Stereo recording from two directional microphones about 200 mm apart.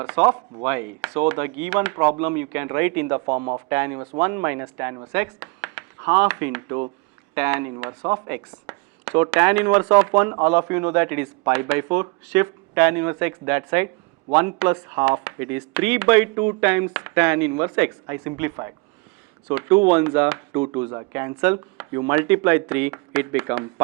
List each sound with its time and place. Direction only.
0.0 s speech: 10° right (ahead or behind)
3.2 s speech: 25° right (ahead or behind)
3.7 s speech: 10° right (ahead or behind)